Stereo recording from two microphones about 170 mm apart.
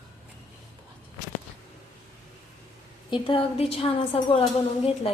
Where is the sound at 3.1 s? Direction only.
30° left (ahead or behind).